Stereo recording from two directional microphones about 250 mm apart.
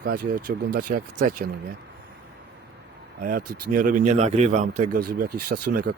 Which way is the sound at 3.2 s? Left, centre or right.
Right.